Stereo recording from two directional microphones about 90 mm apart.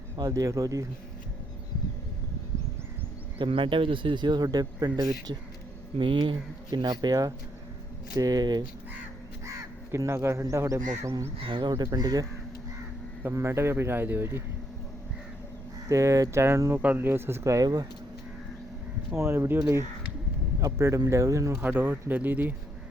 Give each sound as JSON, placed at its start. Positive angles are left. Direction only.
{"t": 0.2, "sound": "speech", "side_deg": -40}
{"t": 3.3, "sound": "speech", "side_deg": -75}
{"t": 6.0, "sound": "speech", "side_deg": -70}
{"t": 6.7, "sound": "speech", "side_deg": -50}
{"t": 9.5, "sound": "speech", "side_deg": -35}
{"t": 11.3, "sound": "speech", "side_deg": -70}
{"t": 13.2, "sound": "speech", "side_deg": -30}
{"t": 15.9, "sound": "speech", "side_deg": -35}
{"t": 16.8, "sound": "speech", "side_deg": -20}
{"t": 19.1, "sound": "a man's voice", "side_deg": -30}
{"t": 21.6, "sound": "speech", "side_deg": -20}